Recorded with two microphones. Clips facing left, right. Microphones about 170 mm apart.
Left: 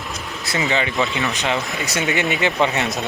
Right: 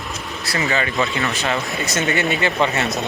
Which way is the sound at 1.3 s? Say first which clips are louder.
Even; 15° left (ahead or behind).